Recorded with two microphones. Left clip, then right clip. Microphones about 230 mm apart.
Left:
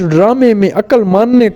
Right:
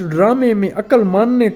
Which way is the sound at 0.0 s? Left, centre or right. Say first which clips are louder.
Left 5 dB; left.